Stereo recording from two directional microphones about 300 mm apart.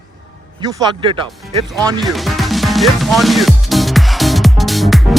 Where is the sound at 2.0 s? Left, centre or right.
Centre.